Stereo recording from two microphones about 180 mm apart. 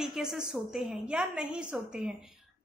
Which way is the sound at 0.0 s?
Centre (ahead or behind).